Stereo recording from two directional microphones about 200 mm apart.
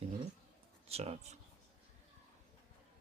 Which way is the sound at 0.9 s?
30° right (ahead or behind).